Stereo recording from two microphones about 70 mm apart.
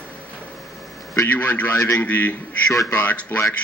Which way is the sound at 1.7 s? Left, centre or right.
Left.